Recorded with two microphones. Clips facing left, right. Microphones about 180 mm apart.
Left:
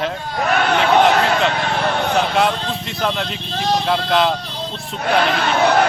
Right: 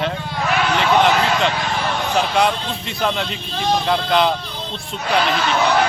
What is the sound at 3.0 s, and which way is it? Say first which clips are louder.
Speech: right 1 dB; centre (ahead or behind).